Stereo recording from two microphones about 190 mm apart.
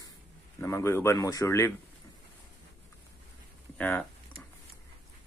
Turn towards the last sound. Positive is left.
turn(degrees=10)  # may be behind; listen again after turning